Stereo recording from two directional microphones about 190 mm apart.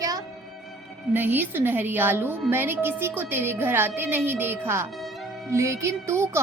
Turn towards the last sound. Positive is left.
turn(degrees=-15)  # may be behind; listen again after turning